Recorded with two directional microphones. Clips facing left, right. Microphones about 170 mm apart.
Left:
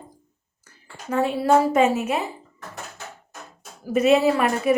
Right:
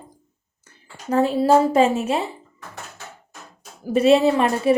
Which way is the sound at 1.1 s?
35° right (ahead or behind).